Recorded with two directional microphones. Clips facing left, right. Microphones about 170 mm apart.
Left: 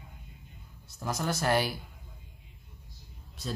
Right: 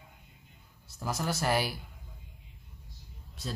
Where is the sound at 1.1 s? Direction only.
5° right (ahead or behind).